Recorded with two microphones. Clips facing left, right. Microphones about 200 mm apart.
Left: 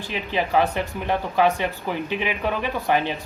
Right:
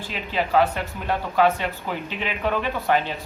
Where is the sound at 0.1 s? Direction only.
15° left (ahead or behind).